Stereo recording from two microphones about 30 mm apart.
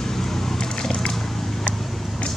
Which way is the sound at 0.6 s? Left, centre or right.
Left.